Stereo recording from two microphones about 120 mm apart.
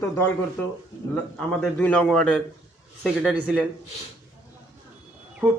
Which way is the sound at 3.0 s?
5° right (ahead or behind).